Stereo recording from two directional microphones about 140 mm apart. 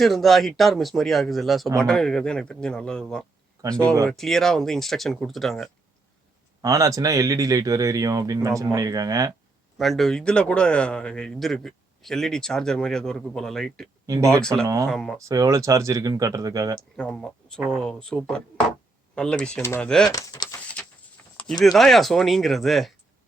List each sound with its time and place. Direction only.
0.0 s a man's voice: centre (ahead or behind)
6.6 s speech: 25° right (ahead or behind)
9.7 s a man's voice: centre (ahead or behind)
15.2 s speech: 25° right (ahead or behind)
16.7 s a man's voice: 10° left (ahead or behind)
19.6 s speech: 20° left (ahead or behind)
21.6 s a man's voice: centre (ahead or behind)